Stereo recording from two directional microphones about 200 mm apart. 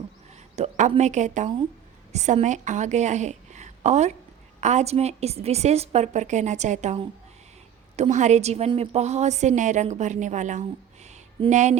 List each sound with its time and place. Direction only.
0.5 s a woman's voice: 35° right (ahead or behind)